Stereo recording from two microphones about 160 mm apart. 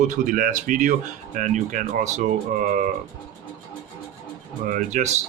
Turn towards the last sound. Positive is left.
turn(degrees=-45)  # may be behind; listen again after turning